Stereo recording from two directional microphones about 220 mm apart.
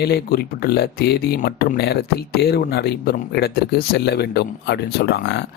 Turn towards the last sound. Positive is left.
turn(degrees=50)  # may be behind; listen again after turning